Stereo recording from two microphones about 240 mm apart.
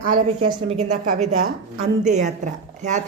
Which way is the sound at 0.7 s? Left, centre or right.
Right.